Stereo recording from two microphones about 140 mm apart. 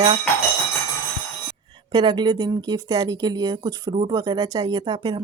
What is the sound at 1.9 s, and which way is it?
Speech, 30° right (ahead or behind).